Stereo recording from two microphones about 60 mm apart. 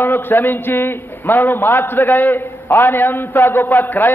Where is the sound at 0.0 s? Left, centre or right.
Left.